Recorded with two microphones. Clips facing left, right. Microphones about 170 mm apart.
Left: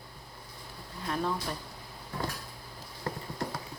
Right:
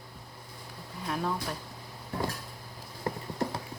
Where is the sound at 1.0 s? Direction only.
5° right (ahead or behind).